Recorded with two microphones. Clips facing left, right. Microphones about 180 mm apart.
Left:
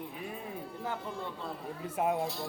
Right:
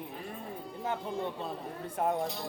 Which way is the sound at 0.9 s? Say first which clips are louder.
Right 5 dB; 20° right (ahead or behind).